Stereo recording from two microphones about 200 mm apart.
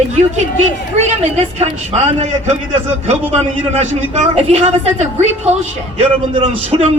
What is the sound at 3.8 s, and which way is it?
A man's voice, 35° right (ahead or behind).